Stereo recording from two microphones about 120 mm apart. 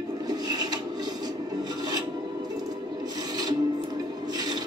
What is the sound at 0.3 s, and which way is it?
Filing, 35° right (ahead or behind).